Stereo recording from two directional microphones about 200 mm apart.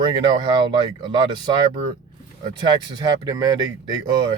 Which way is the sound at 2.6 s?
20° right (ahead or behind).